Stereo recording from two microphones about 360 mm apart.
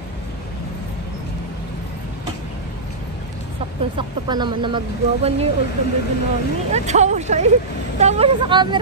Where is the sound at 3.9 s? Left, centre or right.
Centre.